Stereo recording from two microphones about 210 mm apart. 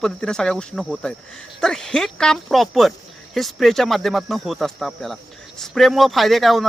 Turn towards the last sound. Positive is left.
turn(degrees=0)  # may be behind; listen again after turning